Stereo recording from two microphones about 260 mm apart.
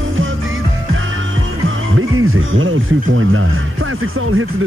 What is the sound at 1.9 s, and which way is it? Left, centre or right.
Music, right.